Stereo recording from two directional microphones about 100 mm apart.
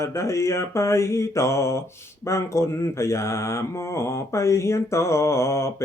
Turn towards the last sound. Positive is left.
turn(degrees=25)  # may be behind; listen again after turning